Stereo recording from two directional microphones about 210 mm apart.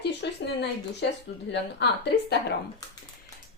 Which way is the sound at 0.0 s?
55° left (ahead or behind).